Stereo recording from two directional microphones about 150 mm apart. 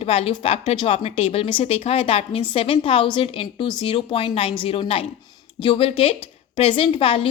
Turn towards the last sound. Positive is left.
turn(degrees=35)  # may be behind; listen again after turning